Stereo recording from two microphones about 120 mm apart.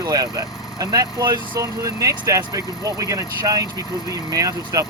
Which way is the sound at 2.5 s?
30° left (ahead or behind).